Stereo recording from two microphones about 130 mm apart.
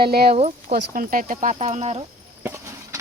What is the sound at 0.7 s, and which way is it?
Speech, 90° right.